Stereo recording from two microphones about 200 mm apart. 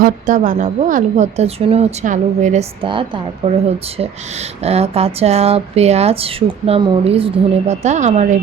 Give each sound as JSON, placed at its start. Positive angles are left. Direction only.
{"t": 0.0, "sound": "speech", "side_deg": -40}
{"t": 4.6, "sound": "speech", "side_deg": -30}